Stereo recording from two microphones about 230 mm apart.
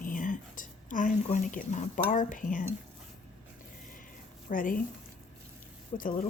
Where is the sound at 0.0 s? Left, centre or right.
Left.